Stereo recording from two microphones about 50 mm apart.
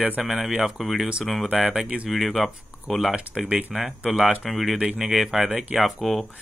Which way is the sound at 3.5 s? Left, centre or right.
Right.